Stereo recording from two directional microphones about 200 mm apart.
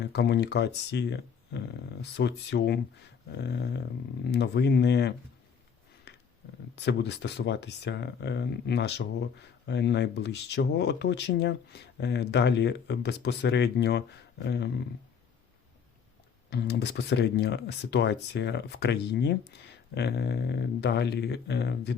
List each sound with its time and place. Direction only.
0.0 s speech: 60° left (ahead or behind)
6.1 s a sound: 55° left (ahead or behind)
6.7 s speech: 60° left (ahead or behind)
16.5 s speech: 55° left (ahead or behind)